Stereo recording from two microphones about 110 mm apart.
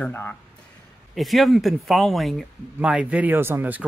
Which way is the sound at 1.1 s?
Centre (ahead or behind).